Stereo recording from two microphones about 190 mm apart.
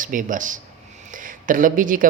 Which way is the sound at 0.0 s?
45° right (ahead or behind).